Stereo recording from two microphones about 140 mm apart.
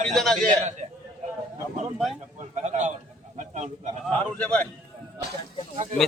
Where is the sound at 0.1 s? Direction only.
5° left (ahead or behind).